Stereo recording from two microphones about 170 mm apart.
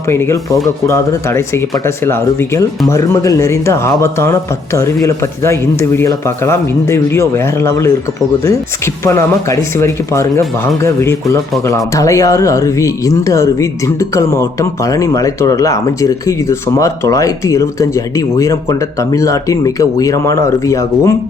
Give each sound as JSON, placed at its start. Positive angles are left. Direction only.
{"t": 0.1, "sound": "speech", "side_deg": 15}
{"t": 9.0, "sound": "speech", "side_deg": 15}